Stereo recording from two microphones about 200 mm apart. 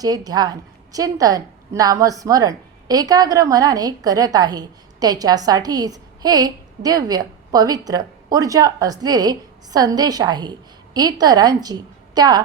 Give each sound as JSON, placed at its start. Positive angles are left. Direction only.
{"t": 0.0, "sound": "a woman's voice", "side_deg": -20}